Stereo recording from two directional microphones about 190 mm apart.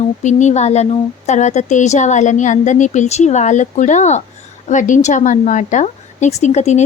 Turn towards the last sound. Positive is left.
turn(degrees=35)  # may be behind; listen again after turning